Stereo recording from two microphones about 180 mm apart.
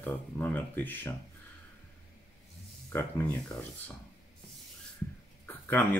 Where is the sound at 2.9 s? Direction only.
10° left (ahead or behind).